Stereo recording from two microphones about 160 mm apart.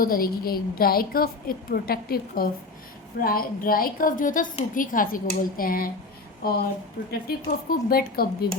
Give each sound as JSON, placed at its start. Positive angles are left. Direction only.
{"t": 0.0, "sound": "a woman's voice", "side_deg": 65}
{"t": 6.4, "sound": "a woman's voice", "side_deg": 75}